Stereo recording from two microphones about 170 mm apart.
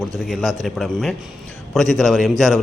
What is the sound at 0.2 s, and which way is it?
A man's voice, centre (ahead or behind).